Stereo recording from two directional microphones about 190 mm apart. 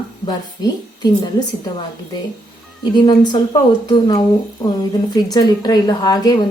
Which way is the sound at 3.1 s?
25° left (ahead or behind).